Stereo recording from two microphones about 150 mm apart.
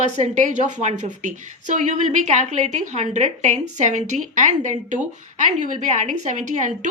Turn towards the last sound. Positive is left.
turn(degrees=-55)  # may be behind; listen again after turning